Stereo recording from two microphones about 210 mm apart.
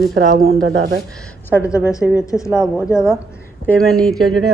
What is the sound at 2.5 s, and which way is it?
A woman's voice, 5° right (ahead or behind).